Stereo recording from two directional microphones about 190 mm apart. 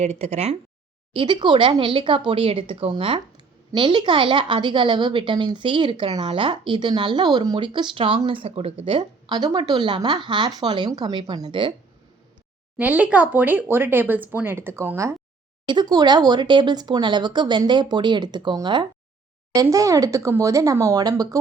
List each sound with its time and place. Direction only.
0.0 s speech: 35° right (ahead or behind)
12.7 s speech: 10° right (ahead or behind)